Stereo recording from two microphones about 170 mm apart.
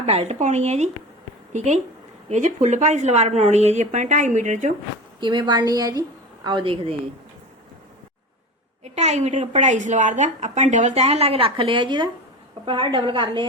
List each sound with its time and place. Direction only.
0.0 s a woman's voice: 35° right (ahead or behind)
5.2 s a woman's voice: 25° right (ahead or behind)
8.8 s a woman's voice: 40° right (ahead or behind)